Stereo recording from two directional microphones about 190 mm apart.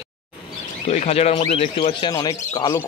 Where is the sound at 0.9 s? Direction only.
35° left (ahead or behind).